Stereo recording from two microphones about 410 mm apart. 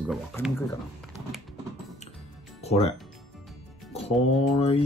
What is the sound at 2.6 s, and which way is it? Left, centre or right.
Music, centre.